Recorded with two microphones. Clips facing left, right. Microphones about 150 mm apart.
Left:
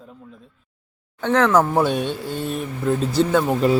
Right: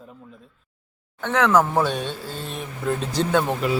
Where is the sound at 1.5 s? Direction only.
10° left (ahead or behind).